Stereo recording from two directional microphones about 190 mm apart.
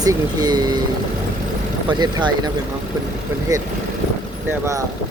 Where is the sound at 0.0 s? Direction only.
20° right (ahead or behind).